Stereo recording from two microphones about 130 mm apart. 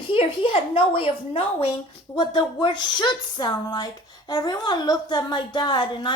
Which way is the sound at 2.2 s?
35° left (ahead or behind).